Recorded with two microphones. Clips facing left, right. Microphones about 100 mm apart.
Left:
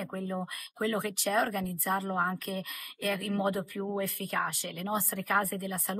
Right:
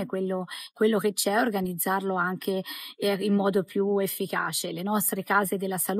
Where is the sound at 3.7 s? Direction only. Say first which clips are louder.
Right 10 dB; 20° right (ahead or behind).